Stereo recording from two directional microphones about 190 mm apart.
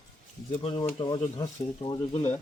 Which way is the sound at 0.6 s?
25° left (ahead or behind).